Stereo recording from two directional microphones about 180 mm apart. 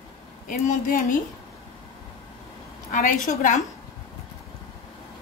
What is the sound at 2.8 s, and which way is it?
Speech, 45° left (ahead or behind).